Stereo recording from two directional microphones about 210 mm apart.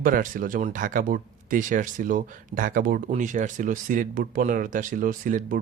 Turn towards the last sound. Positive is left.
turn(degrees=-40)  # may be behind; listen again after turning